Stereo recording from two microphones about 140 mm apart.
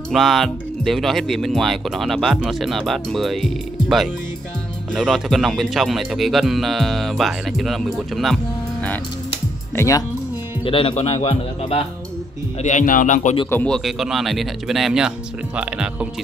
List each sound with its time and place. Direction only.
0.1 s speech: centre (ahead or behind)
9.8 s speech: 20° left (ahead or behind)
10.6 s speech: 40° left (ahead or behind)
12.6 s speech: 65° left (ahead or behind)
13.5 s speech: 10° left (ahead or behind)
13.7 s speech: centre (ahead or behind)